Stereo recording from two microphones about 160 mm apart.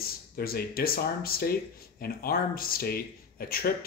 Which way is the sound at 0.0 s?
70° left (ahead or behind).